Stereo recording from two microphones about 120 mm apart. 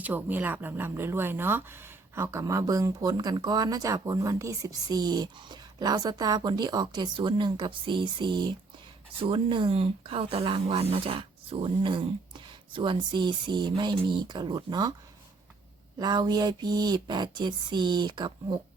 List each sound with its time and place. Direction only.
0.0 s speech: 15° right (ahead or behind); by 14.9 s 35° right (ahead or behind)
16.0 s speech: 35° right (ahead or behind)